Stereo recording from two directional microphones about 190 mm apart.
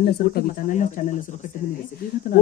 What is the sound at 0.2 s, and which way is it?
Speech, 50° left (ahead or behind).